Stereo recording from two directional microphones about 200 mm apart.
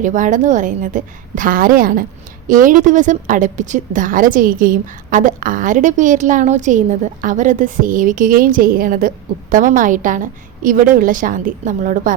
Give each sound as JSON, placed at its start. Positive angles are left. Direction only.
{"t": 0.0, "sound": "a woman's voice", "side_deg": -40}